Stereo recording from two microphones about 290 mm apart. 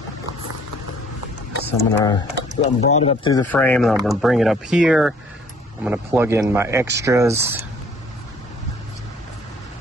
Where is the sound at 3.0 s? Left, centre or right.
Centre.